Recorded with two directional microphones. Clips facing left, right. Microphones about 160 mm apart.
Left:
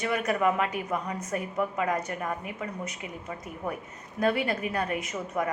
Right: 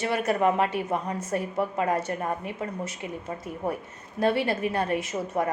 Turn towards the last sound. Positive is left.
turn(degrees=-30)  # may be behind; listen again after turning